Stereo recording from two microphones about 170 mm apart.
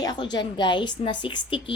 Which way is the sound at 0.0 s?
25° left (ahead or behind).